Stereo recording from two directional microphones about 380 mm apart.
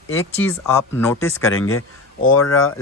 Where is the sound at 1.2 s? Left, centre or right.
Left.